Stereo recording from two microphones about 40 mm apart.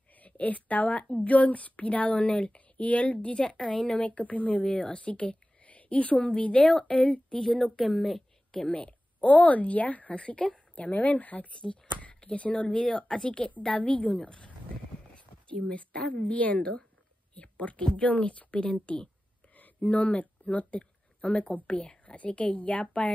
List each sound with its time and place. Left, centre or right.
0.1 s a woman's voice: left; by 3.9 s centre
3.9 s speech: left
4.6 s speech: centre
4.9 s a woman's voice: left; by 7.8 s centre
7.8 s a woman's voice: centre
8.6 s speech: left
10.1 s speech: left
15.1 s speech: left
19.5 s a sound: left
21.6 s speech: left